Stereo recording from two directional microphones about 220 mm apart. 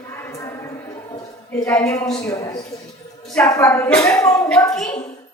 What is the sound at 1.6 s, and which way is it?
A woman's voice, 10° left (ahead or behind).